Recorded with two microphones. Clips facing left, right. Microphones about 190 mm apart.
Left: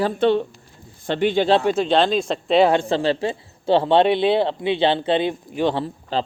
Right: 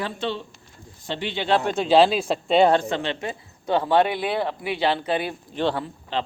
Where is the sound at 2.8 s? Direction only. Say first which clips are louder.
Left 6 dB; 30° left (ahead or behind); by 5.8 s 15° left (ahead or behind).